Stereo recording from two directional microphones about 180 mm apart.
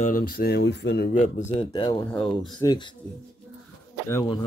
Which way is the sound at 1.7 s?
25° left (ahead or behind).